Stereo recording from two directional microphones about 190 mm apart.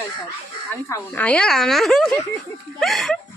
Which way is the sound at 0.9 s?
5° left (ahead or behind).